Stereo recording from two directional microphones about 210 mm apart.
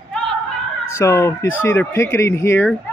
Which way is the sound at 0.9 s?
15° left (ahead or behind).